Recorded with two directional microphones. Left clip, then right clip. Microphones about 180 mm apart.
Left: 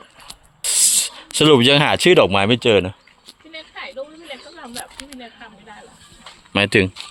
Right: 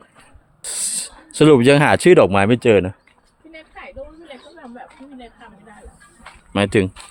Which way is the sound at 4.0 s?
20° right (ahead or behind).